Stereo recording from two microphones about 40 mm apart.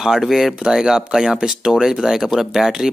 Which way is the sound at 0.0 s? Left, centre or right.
Centre.